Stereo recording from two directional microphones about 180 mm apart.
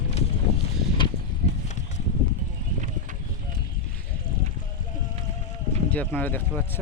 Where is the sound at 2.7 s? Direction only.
45° right (ahead or behind).